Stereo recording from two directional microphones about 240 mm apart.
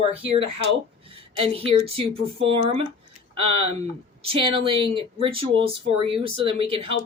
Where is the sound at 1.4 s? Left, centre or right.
Right.